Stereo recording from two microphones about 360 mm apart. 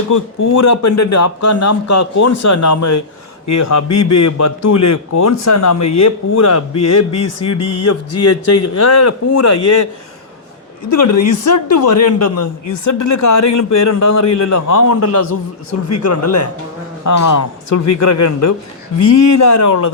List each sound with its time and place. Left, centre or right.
0.1 s a man's voice: left
10.8 s a man's voice: left